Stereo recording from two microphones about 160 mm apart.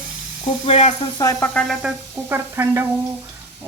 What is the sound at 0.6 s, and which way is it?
Speech, 45° left (ahead or behind).